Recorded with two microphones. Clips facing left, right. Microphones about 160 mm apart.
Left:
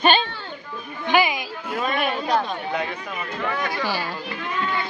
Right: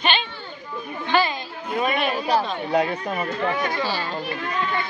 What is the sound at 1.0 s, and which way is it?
Speech, 15° left (ahead or behind).